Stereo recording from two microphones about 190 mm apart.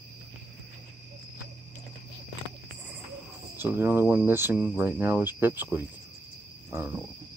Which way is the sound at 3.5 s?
10° right (ahead or behind).